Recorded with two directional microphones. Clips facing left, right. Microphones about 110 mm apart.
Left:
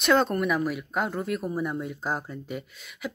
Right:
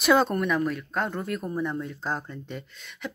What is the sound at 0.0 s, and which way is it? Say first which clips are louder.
Speech: right 1 dB; centre (ahead or behind).